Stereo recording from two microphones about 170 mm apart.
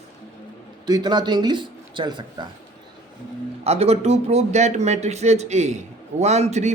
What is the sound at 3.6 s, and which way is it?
A man's voice, 40° right (ahead or behind).